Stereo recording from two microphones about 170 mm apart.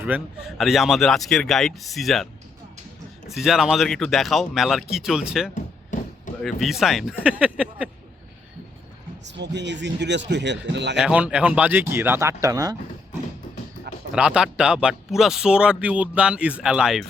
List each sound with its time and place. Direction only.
0.0 s speech: 10° right (ahead or behind)
3.2 s speech: centre (ahead or behind)
5.5 s chop: 50° left (ahead or behind)
6.4 s speech: centre (ahead or behind)
9.2 s a man's voice: 90° right
10.9 s speech: 5° right (ahead or behind)
14.1 s speech: 5° right (ahead or behind)